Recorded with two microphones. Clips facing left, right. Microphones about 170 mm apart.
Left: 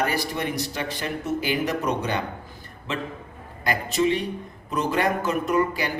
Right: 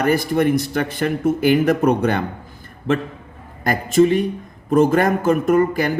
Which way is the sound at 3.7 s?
50° right (ahead or behind).